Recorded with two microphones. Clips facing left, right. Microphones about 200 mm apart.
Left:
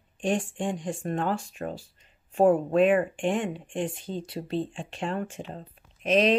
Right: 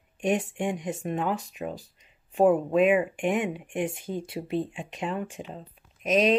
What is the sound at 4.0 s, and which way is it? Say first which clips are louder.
Speech: right 1 dB; 25° left (ahead or behind).